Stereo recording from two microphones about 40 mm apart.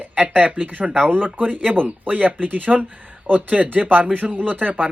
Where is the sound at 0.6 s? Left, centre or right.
Right.